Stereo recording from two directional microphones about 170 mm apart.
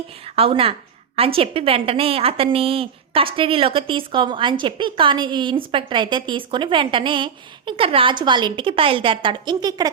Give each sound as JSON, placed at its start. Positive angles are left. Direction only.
{"t": 0.3, "sound": "a woman's voice", "side_deg": -35}